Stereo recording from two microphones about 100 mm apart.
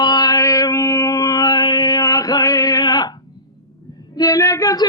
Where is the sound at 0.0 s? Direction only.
45° left (ahead or behind).